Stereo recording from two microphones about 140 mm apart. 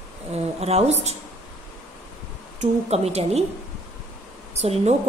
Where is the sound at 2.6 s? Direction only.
50° right (ahead or behind).